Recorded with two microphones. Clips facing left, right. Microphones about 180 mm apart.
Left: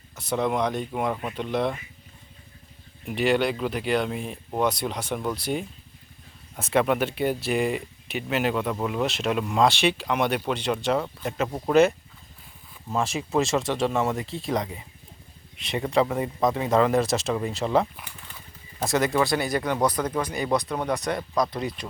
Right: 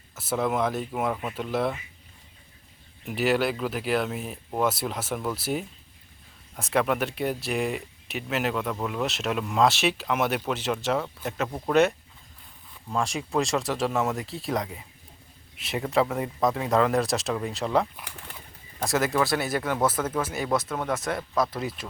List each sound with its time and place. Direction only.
0.2 s speech: 5° right (ahead or behind)
3.1 s speech: centre (ahead or behind)
11.4 s speech: 10° left (ahead or behind)
18.3 s bird: 70° right (ahead or behind)
18.8 s speech: centre (ahead or behind)